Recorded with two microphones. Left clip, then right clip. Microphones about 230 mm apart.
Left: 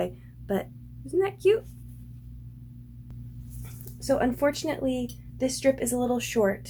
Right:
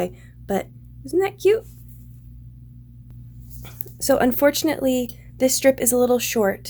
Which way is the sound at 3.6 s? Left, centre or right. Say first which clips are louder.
Right 10 dB; right.